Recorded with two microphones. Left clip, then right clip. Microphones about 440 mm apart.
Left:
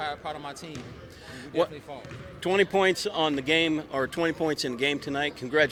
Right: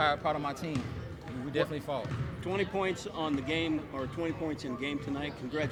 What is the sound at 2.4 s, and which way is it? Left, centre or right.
Speech, left.